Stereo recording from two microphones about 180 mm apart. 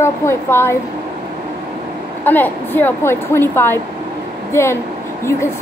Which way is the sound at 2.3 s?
10° left (ahead or behind).